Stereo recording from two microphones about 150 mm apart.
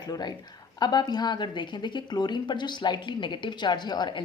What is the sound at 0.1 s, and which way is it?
A woman's voice, 30° left (ahead or behind).